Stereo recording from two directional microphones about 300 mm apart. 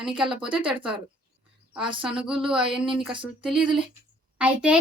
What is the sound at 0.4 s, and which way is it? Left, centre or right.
Speech, centre.